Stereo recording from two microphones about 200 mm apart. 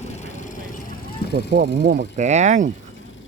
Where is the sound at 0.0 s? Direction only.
35° left (ahead or behind).